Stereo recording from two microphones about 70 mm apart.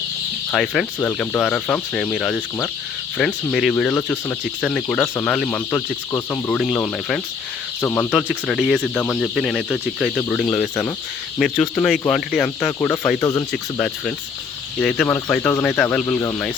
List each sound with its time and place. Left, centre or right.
0.5 s speech: centre
7.8 s speech: left
8.1 s speech: centre
12.8 s speech: centre
14.8 s speech: centre